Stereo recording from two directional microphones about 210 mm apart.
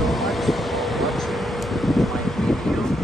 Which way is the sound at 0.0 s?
Centre (ahead or behind).